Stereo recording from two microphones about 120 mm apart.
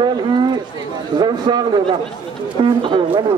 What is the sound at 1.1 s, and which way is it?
A man's voice, 40° right (ahead or behind).